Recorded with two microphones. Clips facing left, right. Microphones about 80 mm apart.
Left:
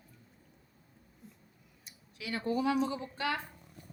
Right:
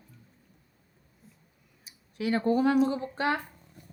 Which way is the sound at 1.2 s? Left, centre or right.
Centre.